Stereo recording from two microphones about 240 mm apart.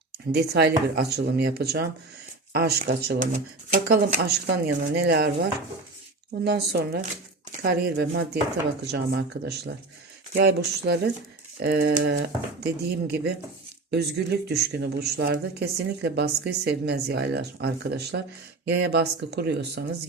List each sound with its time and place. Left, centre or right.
0.3 s speech: right